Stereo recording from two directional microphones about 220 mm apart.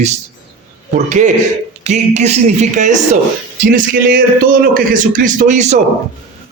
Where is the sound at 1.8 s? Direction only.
30° right (ahead or behind).